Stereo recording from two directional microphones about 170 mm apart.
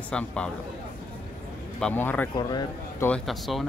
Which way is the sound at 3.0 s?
5° left (ahead or behind).